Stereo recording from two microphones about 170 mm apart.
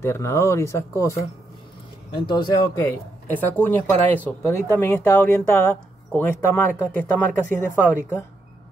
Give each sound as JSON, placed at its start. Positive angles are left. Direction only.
{"t": 0.0, "sound": "speech", "side_deg": 15}
{"t": 2.1, "sound": "speech", "side_deg": 25}